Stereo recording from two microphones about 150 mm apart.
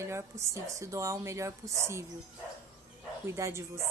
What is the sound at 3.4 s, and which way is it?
Speech, 20° right (ahead or behind).